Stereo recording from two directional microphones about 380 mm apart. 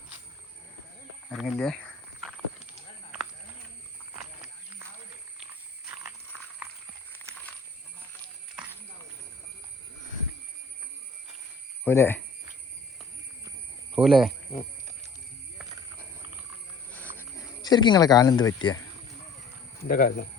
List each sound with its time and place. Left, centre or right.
1.3 s cricket: centre
11.9 s speech: centre
13.9 s speech: centre
16.9 s a sound: centre
19.8 s speech: left